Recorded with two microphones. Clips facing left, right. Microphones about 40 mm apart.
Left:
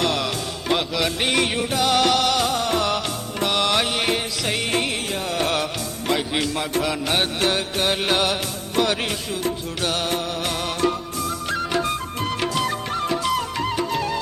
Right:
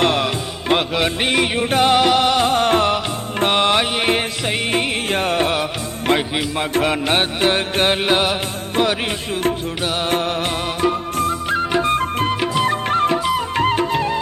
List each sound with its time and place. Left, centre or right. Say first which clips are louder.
0.0 s music: right 5 dB; right
1.3 s music: right 2 dB; centre
1.7 s music: right 7 dB; right
2.0 s music: right 4 dB; right
2.5 s music: right 6 dB; right
5.1 s carnatic music: right 7 dB; right
6.1 s music: right 4 dB; right; by 10.1 s centre
10.1 s music: right 5 dB; right
11.4 s music: right 5 dB; right
11.9 s music: right 7 dB; right
12.3 s music: right 1 dB; right
13.1 s music: right 3 dB; centre
13.6 s music: right 6 dB; right